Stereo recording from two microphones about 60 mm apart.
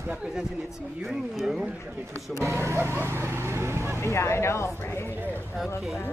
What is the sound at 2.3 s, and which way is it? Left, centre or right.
Speech, right.